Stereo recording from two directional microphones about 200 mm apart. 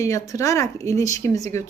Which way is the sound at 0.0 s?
15° left (ahead or behind).